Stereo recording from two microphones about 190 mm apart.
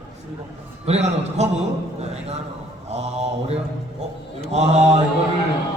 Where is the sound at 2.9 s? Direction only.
35° right (ahead or behind).